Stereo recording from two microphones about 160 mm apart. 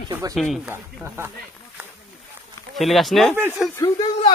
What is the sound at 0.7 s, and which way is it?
Speech, 10° right (ahead or behind).